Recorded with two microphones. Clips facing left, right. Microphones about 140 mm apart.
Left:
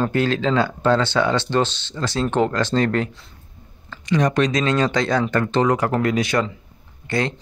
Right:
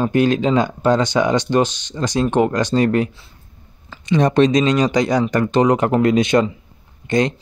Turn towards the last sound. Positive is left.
turn(degrees=-20)  # may be behind; listen again after turning